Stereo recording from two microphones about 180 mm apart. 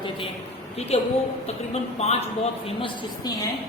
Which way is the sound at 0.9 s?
35° left (ahead or behind).